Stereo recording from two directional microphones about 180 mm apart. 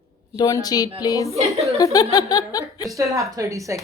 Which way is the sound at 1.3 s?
35° right (ahead or behind).